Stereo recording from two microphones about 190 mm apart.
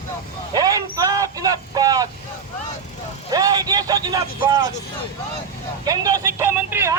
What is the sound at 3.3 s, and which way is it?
A man's voice, 20° right (ahead or behind).